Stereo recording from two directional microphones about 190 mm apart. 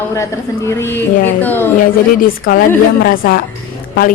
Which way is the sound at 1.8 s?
50° left (ahead or behind).